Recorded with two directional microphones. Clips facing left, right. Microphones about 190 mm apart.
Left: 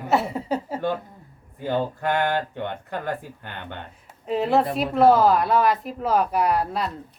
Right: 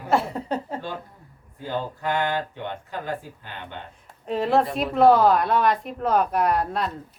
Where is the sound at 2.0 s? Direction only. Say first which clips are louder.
Even; 55° left (ahead or behind).